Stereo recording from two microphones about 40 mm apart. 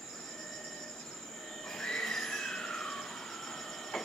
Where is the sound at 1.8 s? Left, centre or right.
Centre.